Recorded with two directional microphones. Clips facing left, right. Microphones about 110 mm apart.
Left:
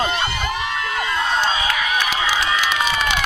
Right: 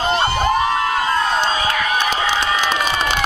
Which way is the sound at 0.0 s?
35° right (ahead or behind).